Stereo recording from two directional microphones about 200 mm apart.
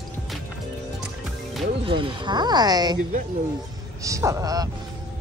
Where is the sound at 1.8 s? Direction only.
25° right (ahead or behind).